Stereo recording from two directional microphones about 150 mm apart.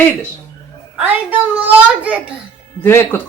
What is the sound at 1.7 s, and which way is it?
Speech, 10° right (ahead or behind).